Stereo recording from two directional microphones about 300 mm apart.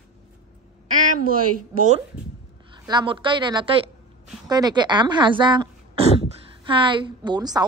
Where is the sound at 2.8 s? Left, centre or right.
Centre.